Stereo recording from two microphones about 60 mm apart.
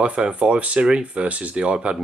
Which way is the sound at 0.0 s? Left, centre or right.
Centre.